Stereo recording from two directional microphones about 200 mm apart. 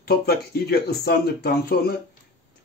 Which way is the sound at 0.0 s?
50° left (ahead or behind).